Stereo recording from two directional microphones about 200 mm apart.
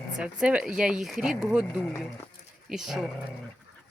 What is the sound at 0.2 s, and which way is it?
Speech, 5° right (ahead or behind).